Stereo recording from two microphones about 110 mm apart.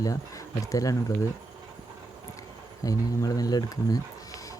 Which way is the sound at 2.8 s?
30° left (ahead or behind).